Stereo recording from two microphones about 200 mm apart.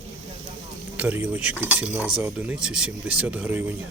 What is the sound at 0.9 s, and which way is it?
Speech, 10° right (ahead or behind).